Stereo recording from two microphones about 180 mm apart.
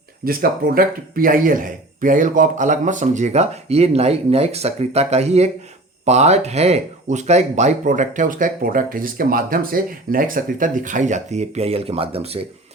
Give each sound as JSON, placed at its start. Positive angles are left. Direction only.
{"t": 0.3, "sound": "a man's voice", "side_deg": -55}